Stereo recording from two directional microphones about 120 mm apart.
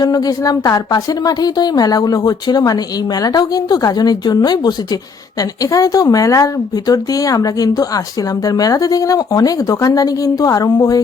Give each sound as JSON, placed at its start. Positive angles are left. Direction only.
{"t": 0.0, "sound": "a woman's voice", "side_deg": 35}